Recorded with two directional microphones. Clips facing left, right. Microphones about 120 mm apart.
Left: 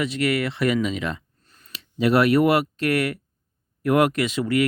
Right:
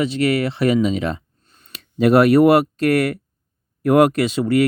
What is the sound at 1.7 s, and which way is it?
Speech, 45° right (ahead or behind).